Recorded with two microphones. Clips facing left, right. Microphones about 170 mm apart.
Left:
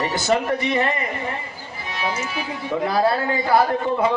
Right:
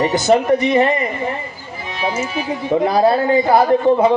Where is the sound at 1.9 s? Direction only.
25° right (ahead or behind).